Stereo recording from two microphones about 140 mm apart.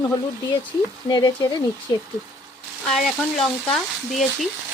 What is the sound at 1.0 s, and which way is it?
Frying, 30° left (ahead or behind).